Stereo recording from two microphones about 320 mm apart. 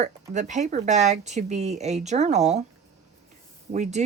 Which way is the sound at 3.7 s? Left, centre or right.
Right.